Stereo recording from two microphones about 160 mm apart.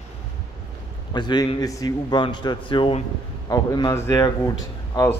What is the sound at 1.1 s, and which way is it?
A man's voice, 25° left (ahead or behind).